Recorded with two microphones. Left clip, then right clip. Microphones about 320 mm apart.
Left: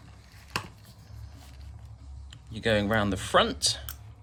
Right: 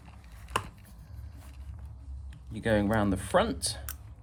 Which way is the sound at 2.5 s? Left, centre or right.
Centre.